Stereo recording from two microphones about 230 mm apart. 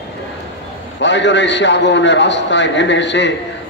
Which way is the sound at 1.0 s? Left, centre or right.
Left.